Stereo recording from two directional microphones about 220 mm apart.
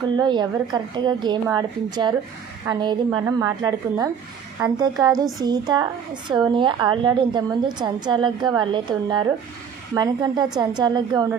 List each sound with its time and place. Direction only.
0.0 s a woman's voice: 20° right (ahead or behind)